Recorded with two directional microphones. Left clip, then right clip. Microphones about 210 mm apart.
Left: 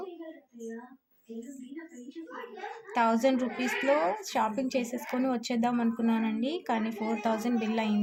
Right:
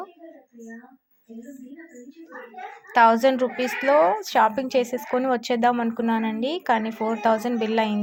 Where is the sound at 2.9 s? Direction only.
15° right (ahead or behind).